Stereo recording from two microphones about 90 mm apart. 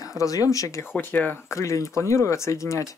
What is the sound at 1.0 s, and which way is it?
Speech, 20° left (ahead or behind).